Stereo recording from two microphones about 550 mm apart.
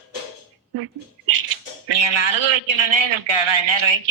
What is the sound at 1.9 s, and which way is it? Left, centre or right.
A man's voice, right.